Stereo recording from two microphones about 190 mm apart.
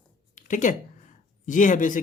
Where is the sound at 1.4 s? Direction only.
40° left (ahead or behind).